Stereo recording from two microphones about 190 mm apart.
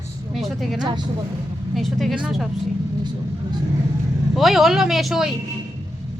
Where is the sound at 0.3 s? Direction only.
Centre (ahead or behind).